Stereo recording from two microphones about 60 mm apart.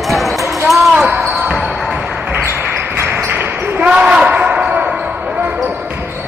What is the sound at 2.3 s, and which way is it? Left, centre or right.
Basketball bounce, right.